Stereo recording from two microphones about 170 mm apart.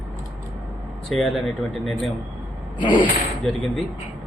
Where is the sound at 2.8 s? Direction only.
30° left (ahead or behind).